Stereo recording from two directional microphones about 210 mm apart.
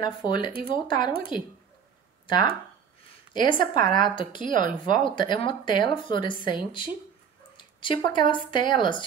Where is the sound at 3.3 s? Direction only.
20° left (ahead or behind).